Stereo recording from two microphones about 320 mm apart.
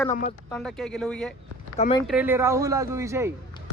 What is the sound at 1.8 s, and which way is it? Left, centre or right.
Speech, centre.